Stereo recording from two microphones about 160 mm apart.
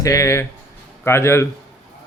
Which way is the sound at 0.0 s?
20° left (ahead or behind).